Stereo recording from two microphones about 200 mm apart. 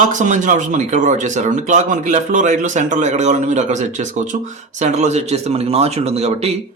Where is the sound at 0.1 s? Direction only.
40° right (ahead or behind).